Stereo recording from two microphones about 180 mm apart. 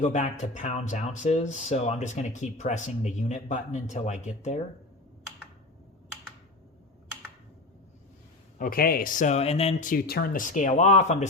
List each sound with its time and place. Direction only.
0.0 s speech: 40° left (ahead or behind)
8.5 s speech: 55° left (ahead or behind); by 9.9 s 35° left (ahead or behind)
9.9 s speech: 55° left (ahead or behind)